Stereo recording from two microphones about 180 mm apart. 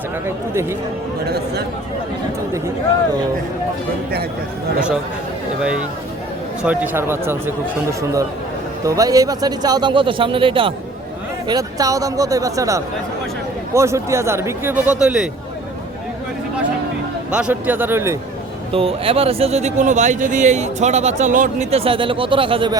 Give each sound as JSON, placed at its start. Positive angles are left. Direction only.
{"t": 0.3, "sound": "speech", "side_deg": -15}
{"t": 1.2, "sound": "speech", "side_deg": -60}
{"t": 6.6, "sound": "a man's voice", "side_deg": -5}
{"t": 17.3, "sound": "speech", "side_deg": -10}
{"t": 18.7, "sound": "speech", "side_deg": -30}